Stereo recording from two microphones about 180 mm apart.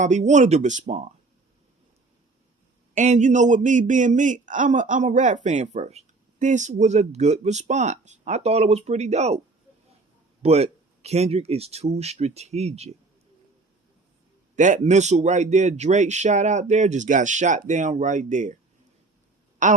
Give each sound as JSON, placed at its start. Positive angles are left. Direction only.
{"t": 0.0, "sound": "speech", "side_deg": -40}
{"t": 2.9, "sound": "speech", "side_deg": -40}
{"t": 10.4, "sound": "speech", "side_deg": -35}
{"t": 14.5, "sound": "speech", "side_deg": -45}
{"t": 19.6, "sound": "a woman's voice", "side_deg": -45}